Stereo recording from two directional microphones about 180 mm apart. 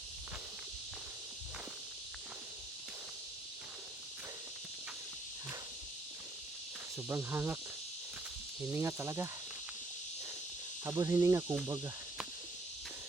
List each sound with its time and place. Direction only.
7.1 s speech: 15° right (ahead or behind)
8.7 s speech: 15° right (ahead or behind)
10.8 s speech: 15° right (ahead or behind)